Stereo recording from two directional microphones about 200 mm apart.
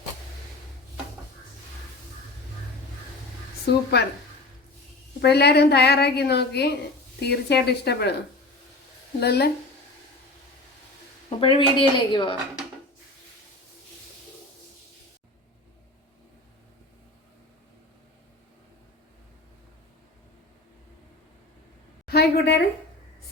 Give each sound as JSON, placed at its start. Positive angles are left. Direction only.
{"t": 3.9, "sound": "a woman's voice", "side_deg": 55}
{"t": 5.2, "sound": "a woman's voice", "side_deg": 55}
{"t": 9.2, "sound": "a woman's voice", "side_deg": 55}
{"t": 11.3, "sound": "speech", "side_deg": 25}
{"t": 22.0, "sound": "a woman's voice", "side_deg": 55}